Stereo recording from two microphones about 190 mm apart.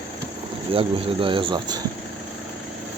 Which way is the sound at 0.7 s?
30° right (ahead or behind).